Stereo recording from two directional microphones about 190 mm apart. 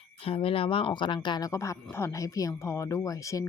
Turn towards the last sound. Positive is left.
turn(degrees=15)  # may be behind; listen again after turning